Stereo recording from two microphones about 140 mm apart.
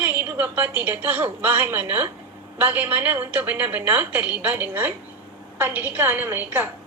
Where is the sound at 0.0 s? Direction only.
15° right (ahead or behind).